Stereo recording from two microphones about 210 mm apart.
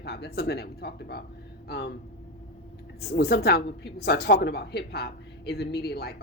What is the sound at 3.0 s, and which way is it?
Speech, 50° left (ahead or behind).